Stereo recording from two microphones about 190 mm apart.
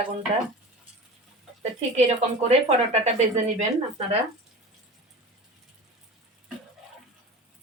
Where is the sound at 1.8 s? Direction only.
35° right (ahead or behind).